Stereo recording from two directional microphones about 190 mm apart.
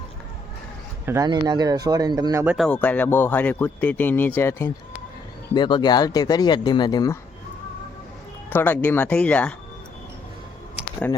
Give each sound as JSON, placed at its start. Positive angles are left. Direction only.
{"t": 1.0, "sound": "speech", "side_deg": -15}
{"t": 2.6, "sound": "speech", "side_deg": 5}
{"t": 5.5, "sound": "speech", "side_deg": 25}
{"t": 8.4, "sound": "speech", "side_deg": 10}